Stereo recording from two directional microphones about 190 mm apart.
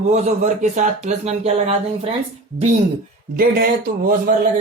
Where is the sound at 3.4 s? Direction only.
55° right (ahead or behind).